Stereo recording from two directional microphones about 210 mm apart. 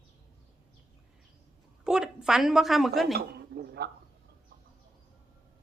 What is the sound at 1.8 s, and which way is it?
A woman's voice, 5° right (ahead or behind).